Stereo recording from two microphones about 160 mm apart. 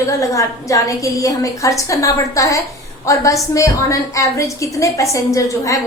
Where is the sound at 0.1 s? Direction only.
20° left (ahead or behind).